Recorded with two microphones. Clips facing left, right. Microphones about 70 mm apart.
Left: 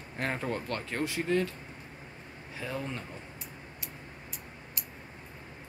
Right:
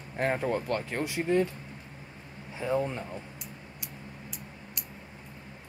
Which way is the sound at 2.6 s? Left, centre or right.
Right.